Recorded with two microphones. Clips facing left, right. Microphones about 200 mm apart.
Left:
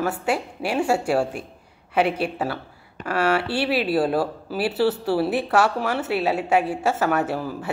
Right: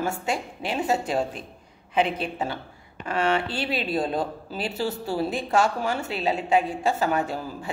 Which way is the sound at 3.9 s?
70° left (ahead or behind).